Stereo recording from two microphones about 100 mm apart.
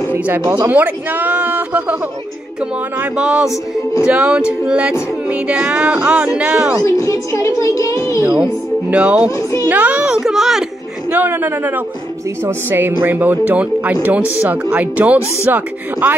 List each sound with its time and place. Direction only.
0.1 s speech: 20° right (ahead or behind)
3.0 s speech: 10° right (ahead or behind)
6.8 s speech: 30° left (ahead or behind)
8.2 s speech: 20° right (ahead or behind)
9.4 s speech: 30° left (ahead or behind)
9.7 s speech: 15° right (ahead or behind)
11.1 s speech: 20° right (ahead or behind)